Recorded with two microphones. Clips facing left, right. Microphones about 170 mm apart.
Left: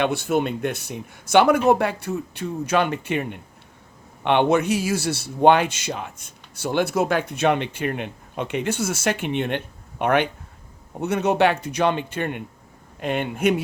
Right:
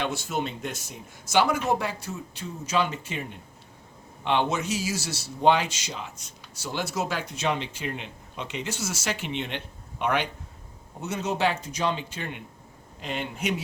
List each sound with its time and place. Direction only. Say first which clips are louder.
0.0 s speech: left 8 dB; 60° left (ahead or behind)